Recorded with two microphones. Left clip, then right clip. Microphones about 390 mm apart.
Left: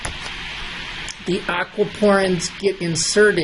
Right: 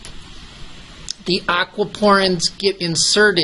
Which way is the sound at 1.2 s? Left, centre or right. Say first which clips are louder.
Right 4 dB; centre.